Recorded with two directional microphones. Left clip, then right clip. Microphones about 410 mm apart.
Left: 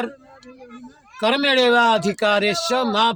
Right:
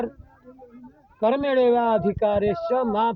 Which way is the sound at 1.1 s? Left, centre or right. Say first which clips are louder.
Left 3 dB; right.